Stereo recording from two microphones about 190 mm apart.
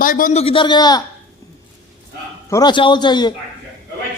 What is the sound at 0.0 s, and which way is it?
Speech, 45° left (ahead or behind).